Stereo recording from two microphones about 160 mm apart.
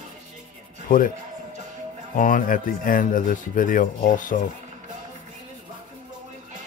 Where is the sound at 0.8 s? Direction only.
60° left (ahead or behind).